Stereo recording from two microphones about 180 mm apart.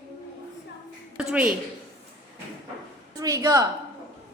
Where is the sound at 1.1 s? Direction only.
5° right (ahead or behind).